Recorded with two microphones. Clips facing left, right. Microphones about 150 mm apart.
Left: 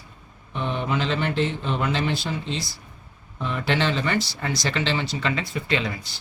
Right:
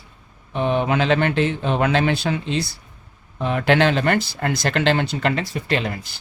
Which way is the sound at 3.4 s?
70° right (ahead or behind).